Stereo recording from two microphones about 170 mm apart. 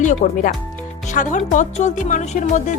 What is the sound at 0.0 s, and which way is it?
Speech, 45° left (ahead or behind).